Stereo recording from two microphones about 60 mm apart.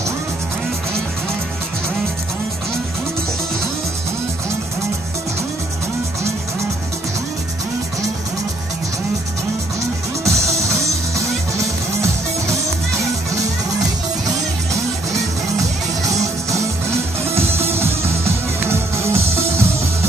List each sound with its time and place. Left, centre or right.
10.2 s music: right
17.4 s music: right